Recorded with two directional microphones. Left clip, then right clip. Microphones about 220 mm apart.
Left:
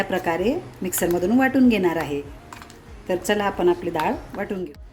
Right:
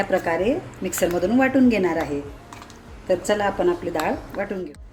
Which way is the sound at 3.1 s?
30° left (ahead or behind).